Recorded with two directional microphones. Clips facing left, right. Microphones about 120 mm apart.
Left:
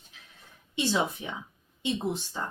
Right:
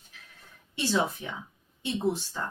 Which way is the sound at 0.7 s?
15° left (ahead or behind).